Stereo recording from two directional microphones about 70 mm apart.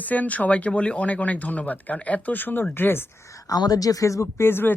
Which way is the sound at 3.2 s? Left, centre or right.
Left.